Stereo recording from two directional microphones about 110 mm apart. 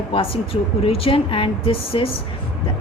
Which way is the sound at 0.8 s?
60° left (ahead or behind).